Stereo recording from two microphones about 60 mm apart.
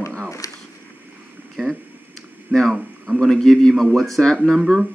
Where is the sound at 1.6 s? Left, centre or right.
Centre.